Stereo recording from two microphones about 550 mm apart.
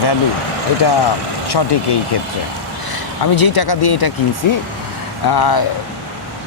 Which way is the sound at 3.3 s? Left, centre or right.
Left.